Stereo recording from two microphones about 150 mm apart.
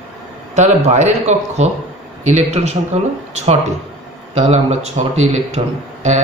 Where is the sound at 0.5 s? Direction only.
50° right (ahead or behind).